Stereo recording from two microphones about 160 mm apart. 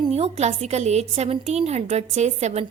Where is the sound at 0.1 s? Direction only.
40° right (ahead or behind).